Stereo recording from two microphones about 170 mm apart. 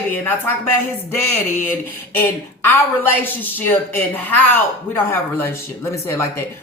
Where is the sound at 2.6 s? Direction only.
15° left (ahead or behind).